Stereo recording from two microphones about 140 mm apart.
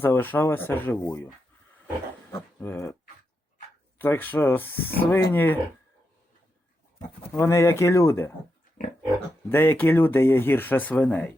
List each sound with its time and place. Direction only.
0.0 s speech: 15° left (ahead or behind)
2.3 s a sound: 20° left (ahead or behind)
3.9 s speech: 15° left (ahead or behind)
7.3 s speech: 20° left (ahead or behind)
9.5 s speech: 15° left (ahead or behind)